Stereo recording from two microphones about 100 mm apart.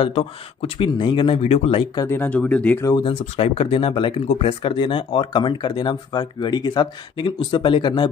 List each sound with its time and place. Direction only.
0.0 s speech: 65° left (ahead or behind)
0.8 s speech: 55° left (ahead or behind); by 1.9 s 80° left
2.0 s speech: 20° left (ahead or behind)
3.0 s speech: 70° left (ahead or behind); by 8.1 s 50° left (ahead or behind)